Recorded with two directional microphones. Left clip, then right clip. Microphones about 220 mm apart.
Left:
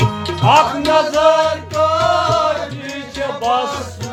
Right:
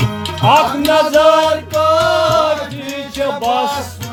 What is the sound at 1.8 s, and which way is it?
Music, 30° right (ahead or behind).